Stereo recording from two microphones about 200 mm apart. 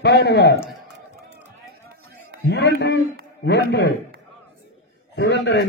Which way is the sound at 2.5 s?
60° left (ahead or behind).